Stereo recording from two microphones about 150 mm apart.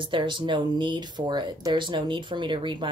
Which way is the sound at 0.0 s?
35° right (ahead or behind).